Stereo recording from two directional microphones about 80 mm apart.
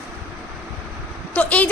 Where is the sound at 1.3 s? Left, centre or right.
Centre.